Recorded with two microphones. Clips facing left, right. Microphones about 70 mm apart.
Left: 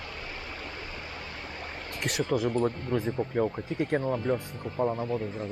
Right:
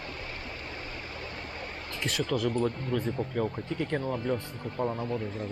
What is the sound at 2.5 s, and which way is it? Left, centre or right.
Speech, left.